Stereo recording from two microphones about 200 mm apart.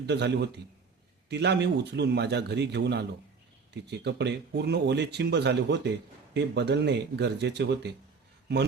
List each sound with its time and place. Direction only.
0.0 s speech: 60° right (ahead or behind)